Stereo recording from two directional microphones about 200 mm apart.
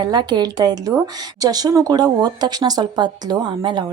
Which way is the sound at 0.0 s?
20° right (ahead or behind).